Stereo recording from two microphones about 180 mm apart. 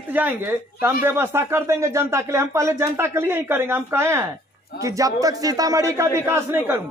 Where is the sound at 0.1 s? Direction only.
10° right (ahead or behind).